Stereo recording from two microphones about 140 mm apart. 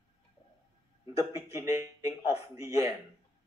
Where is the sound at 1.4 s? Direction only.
25° right (ahead or behind).